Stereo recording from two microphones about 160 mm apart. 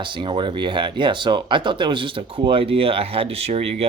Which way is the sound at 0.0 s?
30° right (ahead or behind).